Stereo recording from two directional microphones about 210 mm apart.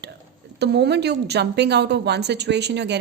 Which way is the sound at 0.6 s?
55° right (ahead or behind).